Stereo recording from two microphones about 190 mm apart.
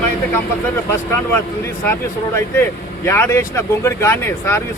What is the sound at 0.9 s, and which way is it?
Speech, 10° left (ahead or behind).